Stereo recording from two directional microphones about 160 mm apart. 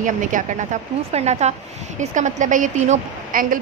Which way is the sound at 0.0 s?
55° right (ahead or behind).